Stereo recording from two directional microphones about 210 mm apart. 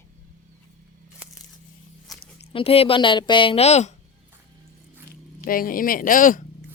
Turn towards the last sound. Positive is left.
turn(degrees=40)  # may be behind; listen again after turning